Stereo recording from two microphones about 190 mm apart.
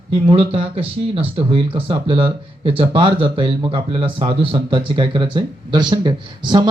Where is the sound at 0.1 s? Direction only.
30° right (ahead or behind).